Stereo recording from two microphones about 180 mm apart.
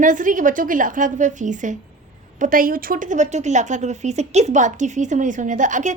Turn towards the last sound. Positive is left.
turn(degrees=-45)  # may be behind; listen again after turning